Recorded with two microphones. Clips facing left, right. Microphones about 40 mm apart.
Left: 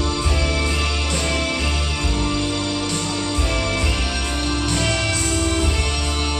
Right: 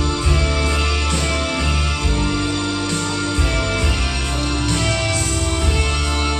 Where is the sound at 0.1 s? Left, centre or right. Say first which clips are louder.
Right 1 dB; centre.